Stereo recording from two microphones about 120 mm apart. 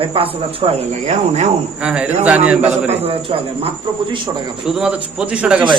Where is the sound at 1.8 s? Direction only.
5° right (ahead or behind).